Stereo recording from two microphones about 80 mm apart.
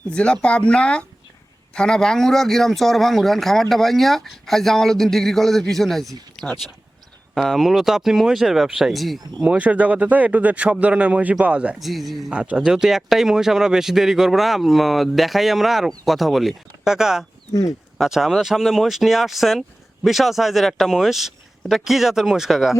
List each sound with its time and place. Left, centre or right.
0.1 s speech: centre
9.4 s speech: centre
11.8 s speech: centre
12.3 s speech: centre